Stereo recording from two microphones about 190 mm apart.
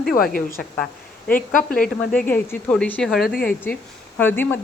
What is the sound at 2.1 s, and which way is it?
Speech, 5° left (ahead or behind).